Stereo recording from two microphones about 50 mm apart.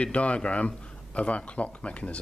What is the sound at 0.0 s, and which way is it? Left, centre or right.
Speech, left.